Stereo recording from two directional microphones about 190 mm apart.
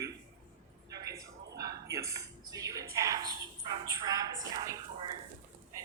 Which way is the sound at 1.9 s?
15° right (ahead or behind).